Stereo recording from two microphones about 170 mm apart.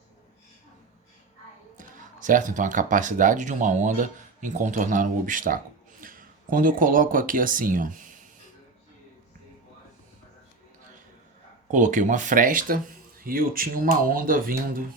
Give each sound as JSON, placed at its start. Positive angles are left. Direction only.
{"t": 2.0, "sound": "speech", "side_deg": -50}
{"t": 11.7, "sound": "speech", "side_deg": -50}